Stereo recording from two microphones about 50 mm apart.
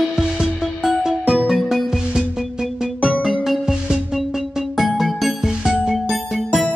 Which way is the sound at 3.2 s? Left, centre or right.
Centre.